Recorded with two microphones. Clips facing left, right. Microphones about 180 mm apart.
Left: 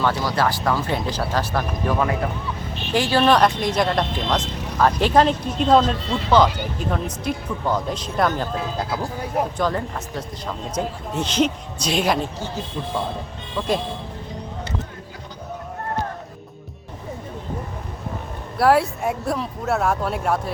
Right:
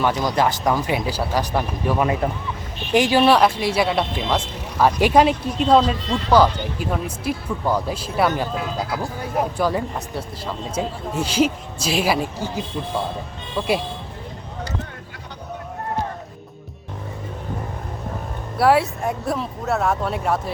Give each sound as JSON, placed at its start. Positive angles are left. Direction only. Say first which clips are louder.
{"t": 0.0, "sound": "speech", "louder": "right 2 dB", "side_deg": -20}
{"t": 9.6, "sound": "speech", "louder": "right 2 dB", "side_deg": -10}
{"t": 18.5, "sound": "speech", "louder": "even", "side_deg": 0}